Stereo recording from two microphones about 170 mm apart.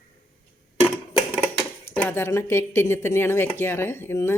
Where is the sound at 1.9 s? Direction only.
10° left (ahead or behind).